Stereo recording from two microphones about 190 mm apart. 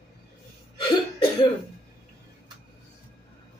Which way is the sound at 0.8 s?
20° left (ahead or behind).